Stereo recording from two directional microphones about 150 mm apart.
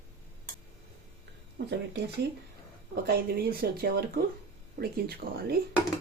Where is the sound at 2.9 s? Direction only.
90° right.